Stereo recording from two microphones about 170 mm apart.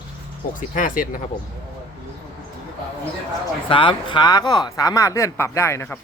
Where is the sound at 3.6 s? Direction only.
30° left (ahead or behind).